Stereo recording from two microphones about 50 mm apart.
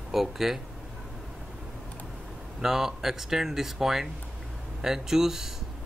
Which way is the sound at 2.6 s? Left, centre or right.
Centre.